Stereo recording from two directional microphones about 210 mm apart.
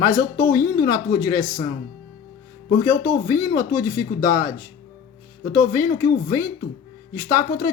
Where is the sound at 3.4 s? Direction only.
15° left (ahead or behind).